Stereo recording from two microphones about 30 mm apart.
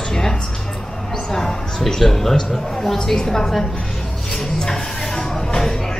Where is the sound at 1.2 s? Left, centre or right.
Centre.